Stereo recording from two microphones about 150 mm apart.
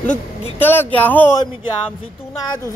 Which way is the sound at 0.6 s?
15° left (ahead or behind).